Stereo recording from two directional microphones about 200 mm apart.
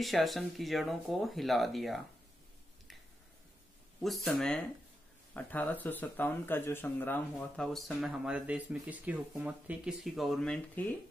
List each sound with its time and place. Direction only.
0.0 s speech: centre (ahead or behind)
4.0 s speech: centre (ahead or behind)